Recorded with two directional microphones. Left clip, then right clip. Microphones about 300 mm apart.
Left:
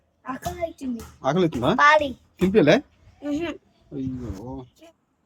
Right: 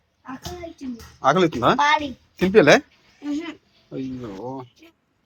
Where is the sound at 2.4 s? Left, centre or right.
Centre.